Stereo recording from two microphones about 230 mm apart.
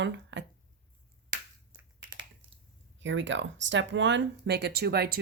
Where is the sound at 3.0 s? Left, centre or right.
Right.